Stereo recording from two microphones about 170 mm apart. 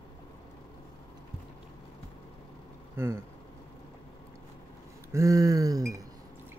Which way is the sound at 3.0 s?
15° right (ahead or behind).